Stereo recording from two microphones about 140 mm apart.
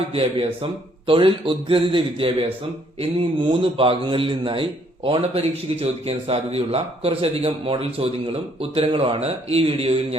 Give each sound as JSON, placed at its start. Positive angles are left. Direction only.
{"t": 0.1, "sound": "a man's voice", "side_deg": -45}